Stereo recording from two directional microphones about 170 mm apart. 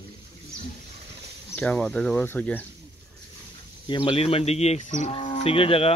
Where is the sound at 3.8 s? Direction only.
30° left (ahead or behind).